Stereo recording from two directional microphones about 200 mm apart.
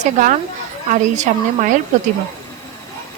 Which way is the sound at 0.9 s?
40° right (ahead or behind).